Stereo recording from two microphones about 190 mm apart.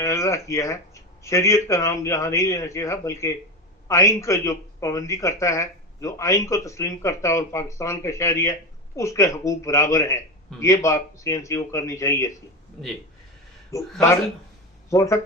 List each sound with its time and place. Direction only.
0.0 s speech: 15° left (ahead or behind)
12.8 s speech: centre (ahead or behind)
13.7 s speech: 15° left (ahead or behind)